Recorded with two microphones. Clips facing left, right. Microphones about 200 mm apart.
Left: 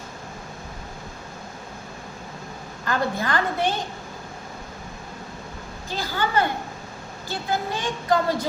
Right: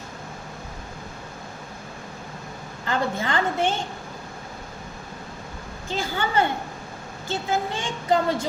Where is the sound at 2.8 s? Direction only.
25° right (ahead or behind).